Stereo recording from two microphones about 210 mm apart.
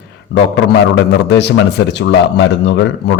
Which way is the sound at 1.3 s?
55° left (ahead or behind).